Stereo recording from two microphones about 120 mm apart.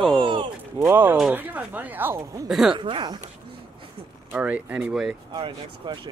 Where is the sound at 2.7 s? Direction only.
40° right (ahead or behind).